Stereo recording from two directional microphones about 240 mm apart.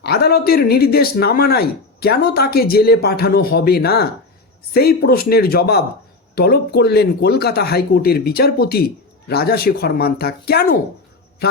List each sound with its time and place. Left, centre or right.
0.0 s speech: left